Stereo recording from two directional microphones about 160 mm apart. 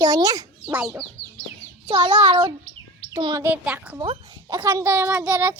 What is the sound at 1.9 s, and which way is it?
A child's voice, 30° right (ahead or behind).